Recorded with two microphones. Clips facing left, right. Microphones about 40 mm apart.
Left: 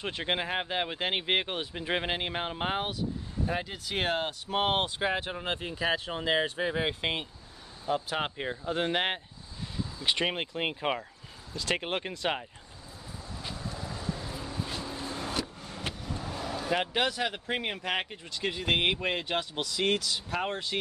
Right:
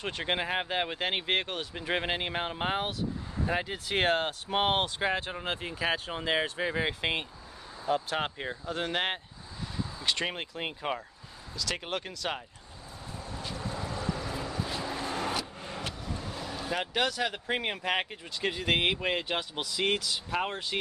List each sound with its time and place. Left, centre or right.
0.0 s speech: centre
3.4 s speech: centre
5.0 s speech: centre
8.6 s speech: centre
13.6 s vehicle: right
14.3 s vehicle: right
14.9 s vehicle: right
16.5 s speech: centre